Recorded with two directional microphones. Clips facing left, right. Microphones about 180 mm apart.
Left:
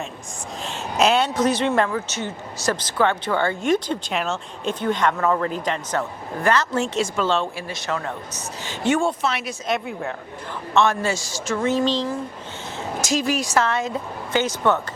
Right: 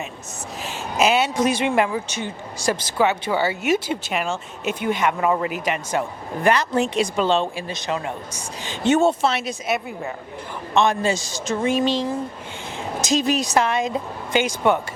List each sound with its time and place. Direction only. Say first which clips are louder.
0.6 s speech: even; 5° right (ahead or behind); by 9.6 s 25° right (ahead or behind)
9.6 s a woman's voice: left 3 dB; 5° right (ahead or behind)
10.8 s speech: right 1 dB; 15° right (ahead or behind)